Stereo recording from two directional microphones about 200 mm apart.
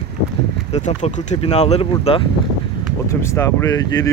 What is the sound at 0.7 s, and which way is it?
Speech, 35° left (ahead or behind).